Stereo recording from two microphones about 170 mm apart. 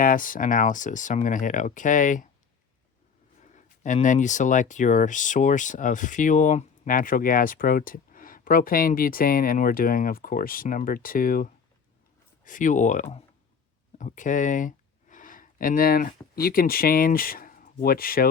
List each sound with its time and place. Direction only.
0.0 s speech: 55° left (ahead or behind)
3.4 s speech: 45° left (ahead or behind)